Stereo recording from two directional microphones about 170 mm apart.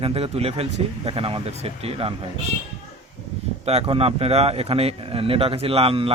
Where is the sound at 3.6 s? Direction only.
35° right (ahead or behind).